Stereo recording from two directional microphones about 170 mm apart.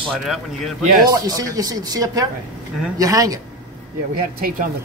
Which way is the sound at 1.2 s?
20° right (ahead or behind).